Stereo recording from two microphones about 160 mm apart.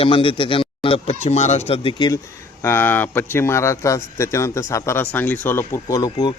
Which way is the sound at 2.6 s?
15° left (ahead or behind).